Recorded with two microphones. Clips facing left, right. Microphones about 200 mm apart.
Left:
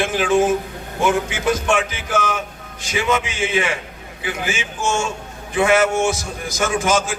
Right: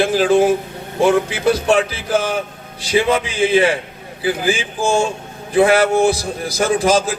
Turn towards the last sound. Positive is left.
turn(degrees=-35)  # may be behind; listen again after turning